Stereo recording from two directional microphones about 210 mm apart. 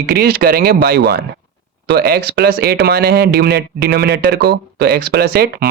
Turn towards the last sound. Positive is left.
turn(degrees=-45)  # may be behind; listen again after turning